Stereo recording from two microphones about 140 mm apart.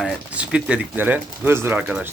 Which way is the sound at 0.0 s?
5° right (ahead or behind).